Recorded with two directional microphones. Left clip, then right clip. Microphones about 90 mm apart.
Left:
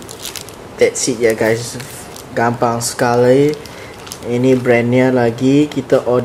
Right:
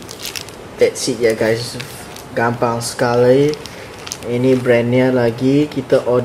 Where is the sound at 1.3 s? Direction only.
30° left (ahead or behind).